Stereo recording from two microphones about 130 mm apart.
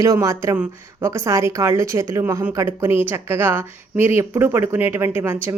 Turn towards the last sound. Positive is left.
turn(degrees=-20)  # may be behind; listen again after turning